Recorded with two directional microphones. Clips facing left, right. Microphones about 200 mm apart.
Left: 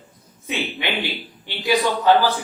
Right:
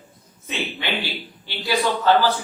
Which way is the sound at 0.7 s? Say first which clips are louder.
Left 2 dB; 15° left (ahead or behind).